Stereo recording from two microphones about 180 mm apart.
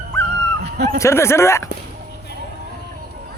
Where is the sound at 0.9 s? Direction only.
15° left (ahead or behind).